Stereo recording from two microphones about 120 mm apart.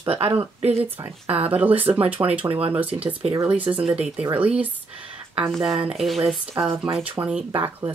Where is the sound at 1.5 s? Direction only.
15° right (ahead or behind).